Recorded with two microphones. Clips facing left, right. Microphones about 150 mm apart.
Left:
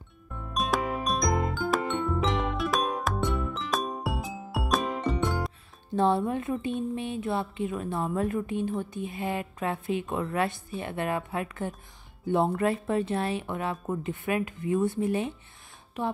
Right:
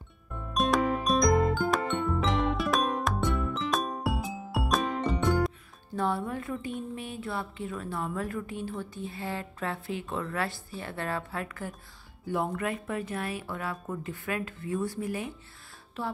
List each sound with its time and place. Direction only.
0.5 s music: centre (ahead or behind)
5.9 s speech: 25° left (ahead or behind)